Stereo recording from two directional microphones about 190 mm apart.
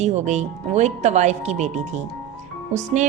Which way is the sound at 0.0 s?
35° right (ahead or behind).